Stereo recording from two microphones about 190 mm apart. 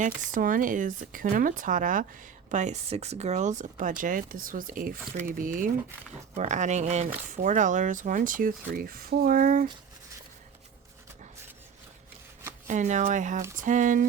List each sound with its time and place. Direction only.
0.0 s speech: 45° right (ahead or behind)
12.6 s speech: 40° right (ahead or behind)